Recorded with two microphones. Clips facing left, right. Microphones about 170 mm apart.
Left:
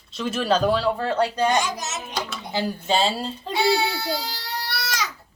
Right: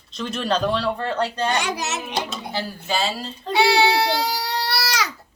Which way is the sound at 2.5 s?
20° left (ahead or behind).